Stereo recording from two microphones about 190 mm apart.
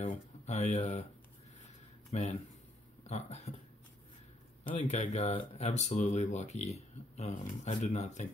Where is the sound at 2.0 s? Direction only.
35° left (ahead or behind).